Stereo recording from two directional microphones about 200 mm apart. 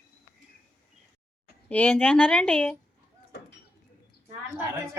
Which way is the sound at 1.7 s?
5° left (ahead or behind).